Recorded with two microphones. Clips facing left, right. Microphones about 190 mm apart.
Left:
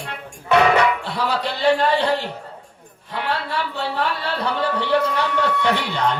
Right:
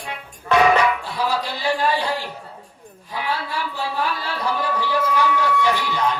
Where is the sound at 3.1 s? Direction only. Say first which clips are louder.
Left 2 dB; 65° left (ahead or behind).